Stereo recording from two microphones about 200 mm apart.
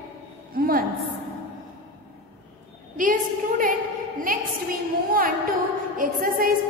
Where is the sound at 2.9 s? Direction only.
45° right (ahead or behind).